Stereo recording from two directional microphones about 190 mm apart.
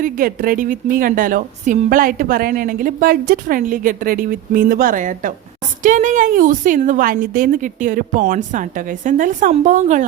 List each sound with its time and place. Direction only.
0.0 s a woman's voice: 50° right (ahead or behind)